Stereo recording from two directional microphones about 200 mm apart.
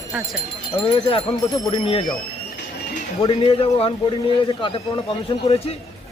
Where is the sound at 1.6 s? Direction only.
25° left (ahead or behind).